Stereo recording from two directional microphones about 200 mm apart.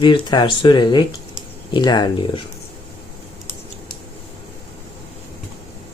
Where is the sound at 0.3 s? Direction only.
25° left (ahead or behind).